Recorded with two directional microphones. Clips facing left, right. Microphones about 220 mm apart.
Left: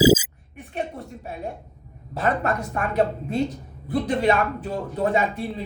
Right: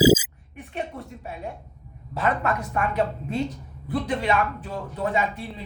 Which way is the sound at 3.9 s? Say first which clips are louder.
Left 4 dB; 40° left (ahead or behind).